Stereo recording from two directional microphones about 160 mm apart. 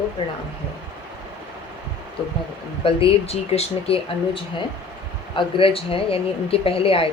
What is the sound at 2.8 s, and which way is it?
A woman's voice, 35° left (ahead or behind).